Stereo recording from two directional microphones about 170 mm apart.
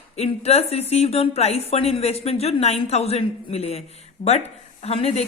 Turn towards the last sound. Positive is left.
turn(degrees=35)  # may be behind; listen again after turning